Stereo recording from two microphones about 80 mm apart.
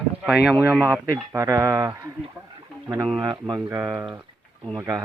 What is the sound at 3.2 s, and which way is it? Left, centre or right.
Speech, right.